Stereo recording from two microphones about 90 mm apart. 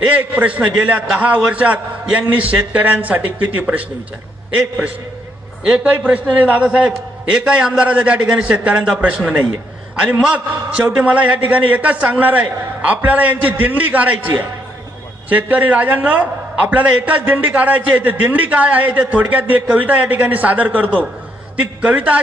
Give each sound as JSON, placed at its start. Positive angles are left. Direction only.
{"t": 0.0, "sound": "a man's voice", "side_deg": -15}